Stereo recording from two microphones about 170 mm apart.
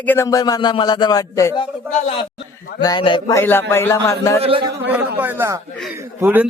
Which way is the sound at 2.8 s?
25° left (ahead or behind).